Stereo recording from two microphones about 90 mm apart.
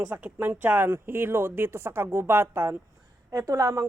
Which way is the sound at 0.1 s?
20° right (ahead or behind).